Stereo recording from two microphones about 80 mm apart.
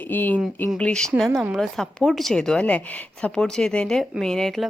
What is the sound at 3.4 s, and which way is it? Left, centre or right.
A woman's voice, centre.